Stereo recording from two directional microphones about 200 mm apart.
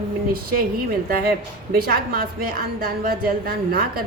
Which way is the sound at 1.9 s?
50° right (ahead or behind).